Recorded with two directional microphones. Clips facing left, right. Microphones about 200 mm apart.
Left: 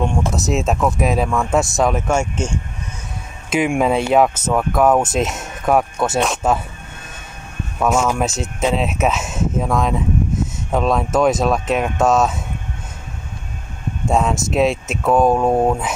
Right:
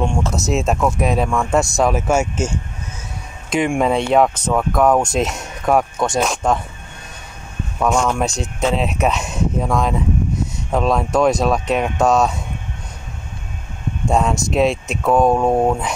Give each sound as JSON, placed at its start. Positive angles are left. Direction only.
{"t": 0.3, "sound": "speech", "side_deg": 0}
{"t": 7.8, "sound": "speech", "side_deg": 5}
{"t": 14.0, "sound": "speech", "side_deg": 0}